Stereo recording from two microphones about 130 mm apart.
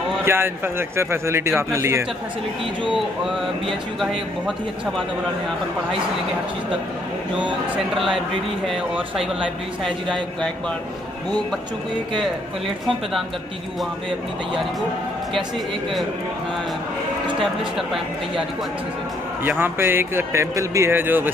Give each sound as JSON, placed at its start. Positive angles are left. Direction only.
{"t": 0.2, "sound": "a man's voice", "side_deg": -20}
{"t": 7.9, "sound": "speech", "side_deg": 0}
{"t": 9.8, "sound": "speech", "side_deg": 5}
{"t": 12.2, "sound": "speech", "side_deg": 0}
{"t": 17.4, "sound": "speech", "side_deg": 0}
{"t": 19.6, "sound": "a man's voice", "side_deg": -15}